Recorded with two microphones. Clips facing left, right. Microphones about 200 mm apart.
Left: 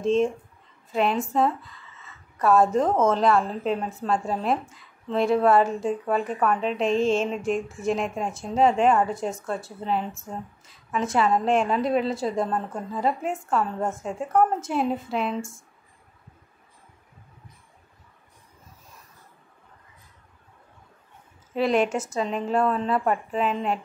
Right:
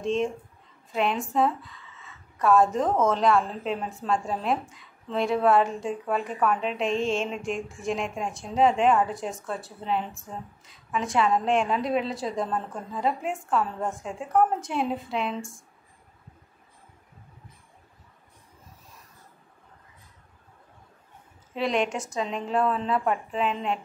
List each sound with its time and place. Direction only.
0.0 s a woman's voice: centre (ahead or behind)
21.5 s a woman's voice: 5° left (ahead or behind)